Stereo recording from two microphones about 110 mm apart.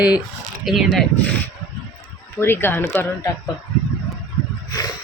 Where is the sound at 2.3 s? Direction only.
20° left (ahead or behind).